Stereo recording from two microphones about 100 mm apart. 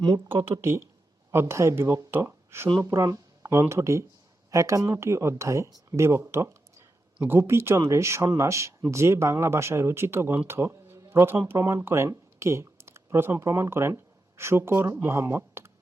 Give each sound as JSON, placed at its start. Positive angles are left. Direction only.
{"t": 0.6, "sound": "speech", "side_deg": -25}